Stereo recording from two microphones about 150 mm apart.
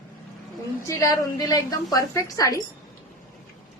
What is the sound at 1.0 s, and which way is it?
A woman's voice, 20° left (ahead or behind).